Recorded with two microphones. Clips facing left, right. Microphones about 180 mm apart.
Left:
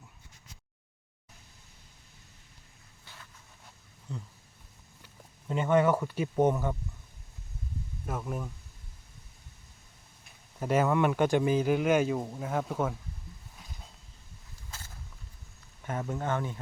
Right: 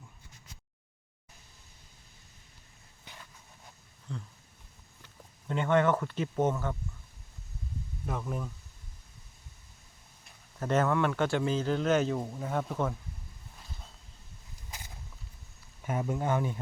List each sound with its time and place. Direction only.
3.1 s a sound: 20° right (ahead or behind)
4.1 s speech: 5° left (ahead or behind)
8.0 s speech: 5° left (ahead or behind)
10.6 s speech: 10° left (ahead or behind)
14.7 s a sound: 15° right (ahead or behind)
15.8 s speech: 10° right (ahead or behind)